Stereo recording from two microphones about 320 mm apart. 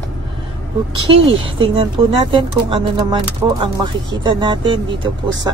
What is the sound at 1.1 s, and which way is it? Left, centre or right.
Speech, right.